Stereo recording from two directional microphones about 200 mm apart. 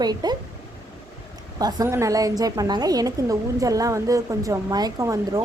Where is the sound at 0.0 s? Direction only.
20° right (ahead or behind).